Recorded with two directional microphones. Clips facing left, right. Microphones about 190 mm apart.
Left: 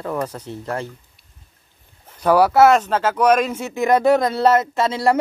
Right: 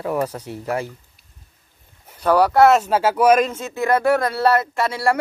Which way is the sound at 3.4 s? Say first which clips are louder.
Left 2 dB; 10° left (ahead or behind).